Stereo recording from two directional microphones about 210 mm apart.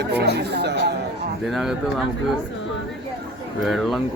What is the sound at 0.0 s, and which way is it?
Speech, 55° right (ahead or behind).